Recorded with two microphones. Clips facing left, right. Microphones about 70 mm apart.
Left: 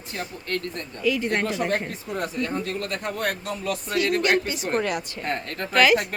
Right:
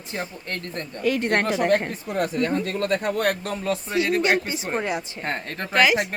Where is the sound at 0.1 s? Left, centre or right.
Right.